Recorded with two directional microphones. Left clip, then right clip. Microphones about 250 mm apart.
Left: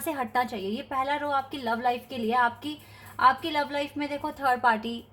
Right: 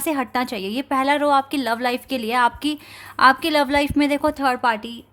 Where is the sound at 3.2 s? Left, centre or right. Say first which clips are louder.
Right 7 dB; right.